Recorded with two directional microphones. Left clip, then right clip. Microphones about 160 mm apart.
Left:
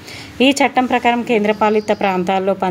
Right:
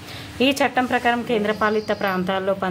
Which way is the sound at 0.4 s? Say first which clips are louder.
Left 5 dB; 25° left (ahead or behind).